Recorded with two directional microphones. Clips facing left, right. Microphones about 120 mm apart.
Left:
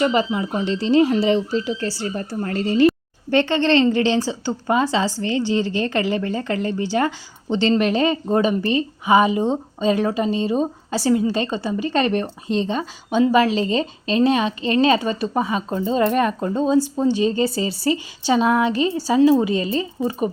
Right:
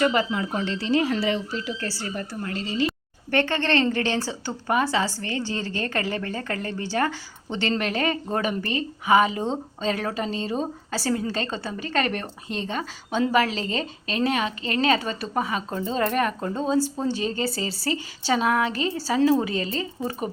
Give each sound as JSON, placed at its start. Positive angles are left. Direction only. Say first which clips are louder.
{"t": 0.0, "sound": "speech", "louder": "left 3 dB", "side_deg": 20}
{"t": 2.1, "sound": "a woman's voice", "louder": "left 5 dB", "side_deg": 30}
{"t": 2.5, "sound": "speech", "louder": "left 10 dB", "side_deg": 50}
{"t": 3.2, "sound": "speech", "louder": "left 6 dB", "side_deg": 20}